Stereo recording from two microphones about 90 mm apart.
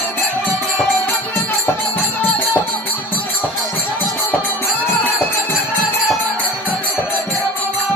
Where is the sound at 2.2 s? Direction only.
25° left (ahead or behind).